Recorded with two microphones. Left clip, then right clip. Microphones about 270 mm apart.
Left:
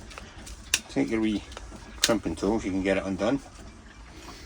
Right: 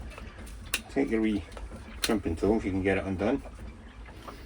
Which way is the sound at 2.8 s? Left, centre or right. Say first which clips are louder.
Left 2 dB; left.